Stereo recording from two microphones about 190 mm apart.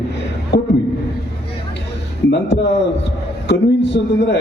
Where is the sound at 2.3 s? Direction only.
65° left (ahead or behind).